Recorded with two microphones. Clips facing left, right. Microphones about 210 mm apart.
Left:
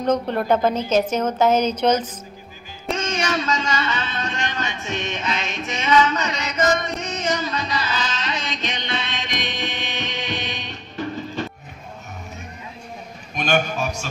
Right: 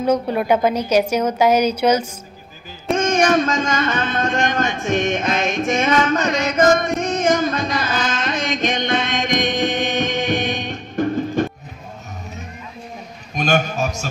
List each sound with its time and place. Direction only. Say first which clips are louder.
0.0 s a woman's voice: right 2 dB; 10° right (ahead or behind)
2.9 s a sound: right 8 dB; 50° right (ahead or behind)
13.4 s a man's voice: right 2 dB; 45° right (ahead or behind)